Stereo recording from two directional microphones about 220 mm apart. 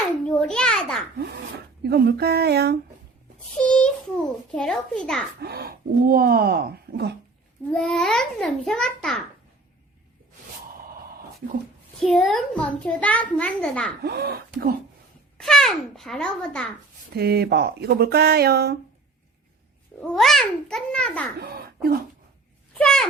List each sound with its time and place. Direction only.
0.3 s a sound: 5° left (ahead or behind)
1.2 s speech: 45° right (ahead or behind)
3.7 s a sound: 5° left (ahead or behind)
4.5 s a child's voice: 5° left (ahead or behind)
5.4 s speech: 45° right (ahead or behind)
7.7 s a child's voice: 5° left (ahead or behind)
11.9 s a child's voice: centre (ahead or behind)
14.0 s speech: 45° right (ahead or behind)
15.4 s a child's voice: centre (ahead or behind)
17.2 s speech: 45° right (ahead or behind)
20.0 s a child's voice: centre (ahead or behind)
21.4 s speech: 45° right (ahead or behind)
22.8 s a child's voice: 5° left (ahead or behind)